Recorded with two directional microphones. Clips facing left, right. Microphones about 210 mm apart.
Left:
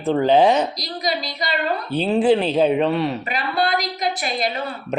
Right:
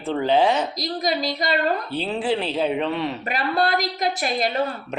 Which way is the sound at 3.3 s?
45° right (ahead or behind).